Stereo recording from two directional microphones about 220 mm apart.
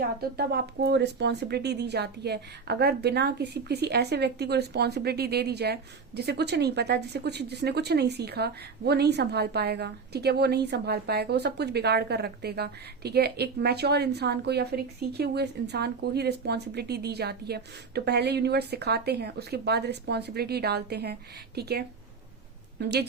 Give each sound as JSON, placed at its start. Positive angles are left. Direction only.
{"t": 0.0, "sound": "speech", "side_deg": -45}